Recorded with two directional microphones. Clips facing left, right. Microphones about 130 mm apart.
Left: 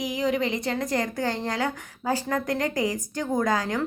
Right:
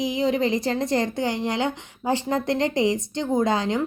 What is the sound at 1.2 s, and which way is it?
A woman's voice, 15° right (ahead or behind).